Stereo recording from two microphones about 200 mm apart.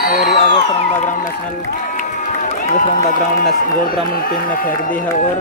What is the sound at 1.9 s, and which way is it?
Run, 40° left (ahead or behind).